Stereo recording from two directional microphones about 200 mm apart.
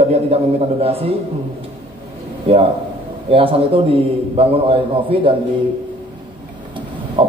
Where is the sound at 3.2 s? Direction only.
30° right (ahead or behind).